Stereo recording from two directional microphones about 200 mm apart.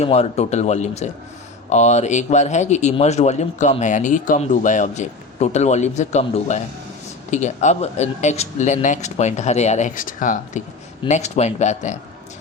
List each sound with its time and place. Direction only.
0.0 s speech: 30° left (ahead or behind)